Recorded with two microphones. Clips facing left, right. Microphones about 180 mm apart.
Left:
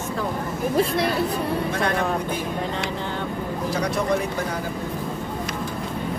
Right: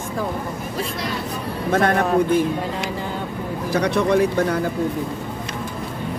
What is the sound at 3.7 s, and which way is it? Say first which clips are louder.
Speech: right 6 dB; 65° right (ahead or behind).